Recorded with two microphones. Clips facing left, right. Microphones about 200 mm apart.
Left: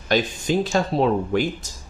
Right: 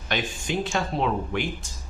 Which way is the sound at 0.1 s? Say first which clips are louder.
Left 7 dB; 35° left (ahead or behind).